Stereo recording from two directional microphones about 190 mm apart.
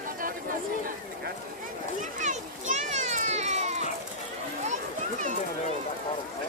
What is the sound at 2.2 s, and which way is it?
Children playing, 40° right (ahead or behind).